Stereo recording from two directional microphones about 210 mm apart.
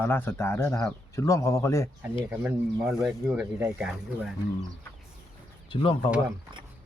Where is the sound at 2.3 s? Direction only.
5° right (ahead or behind).